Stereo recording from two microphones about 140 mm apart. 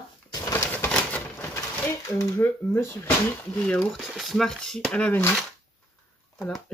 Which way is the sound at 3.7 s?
5° left (ahead or behind).